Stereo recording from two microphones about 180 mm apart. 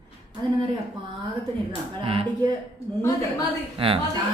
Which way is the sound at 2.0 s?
30° right (ahead or behind).